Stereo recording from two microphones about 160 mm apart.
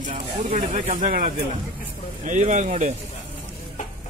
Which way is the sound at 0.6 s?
55° right (ahead or behind).